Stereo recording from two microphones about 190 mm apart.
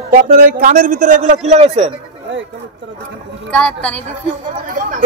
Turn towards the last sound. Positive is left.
turn(degrees=-45)  # may be behind; listen again after turning